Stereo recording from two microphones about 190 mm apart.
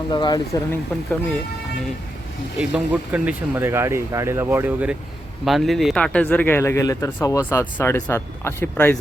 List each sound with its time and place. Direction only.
0.1 s speech: 20° left (ahead or behind)
2.6 s speech: 5° right (ahead or behind); by 9.0 s 10° left (ahead or behind)